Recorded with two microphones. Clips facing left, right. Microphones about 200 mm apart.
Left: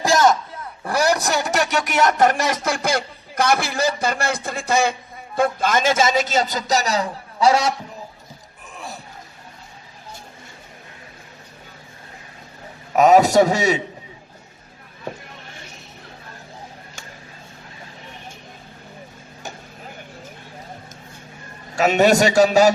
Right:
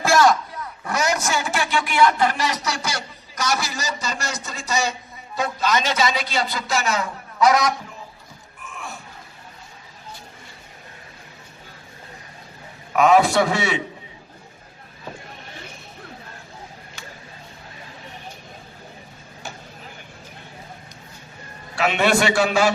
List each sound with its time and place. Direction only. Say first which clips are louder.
0.0 s speech: even; 20° left (ahead or behind)
8.6 s a sound: left 1 dB; 35° left (ahead or behind)
13.0 s a man's voice: left 3 dB; 40° left (ahead or behind)
21.8 s a man's voice: left 4 dB; 40° left (ahead or behind)